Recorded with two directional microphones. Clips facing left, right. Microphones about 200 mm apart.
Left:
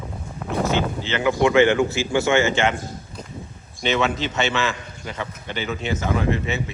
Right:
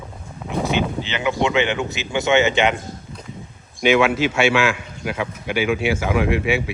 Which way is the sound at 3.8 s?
10° right (ahead or behind).